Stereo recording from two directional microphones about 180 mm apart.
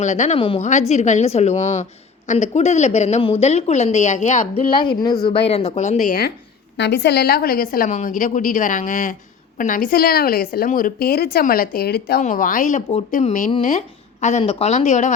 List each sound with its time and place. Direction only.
0.0 s speech: 40° left (ahead or behind)
0.3 s a woman's voice: 30° left (ahead or behind)
4.8 s a woman's voice: 25° left (ahead or behind); by 6.3 s 55° left (ahead or behind)
6.7 s a woman's voice: 70° left (ahead or behind)
12.2 s a woman's voice: 45° left (ahead or behind)